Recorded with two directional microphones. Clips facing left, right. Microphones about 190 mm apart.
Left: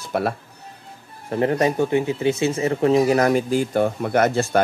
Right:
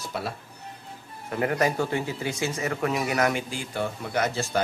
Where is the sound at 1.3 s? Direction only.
30° left (ahead or behind).